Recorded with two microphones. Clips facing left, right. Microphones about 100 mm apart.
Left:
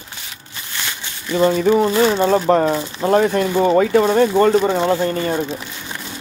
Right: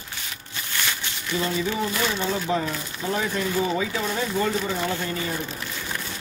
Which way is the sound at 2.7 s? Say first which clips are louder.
Left 11 dB; 35° left (ahead or behind).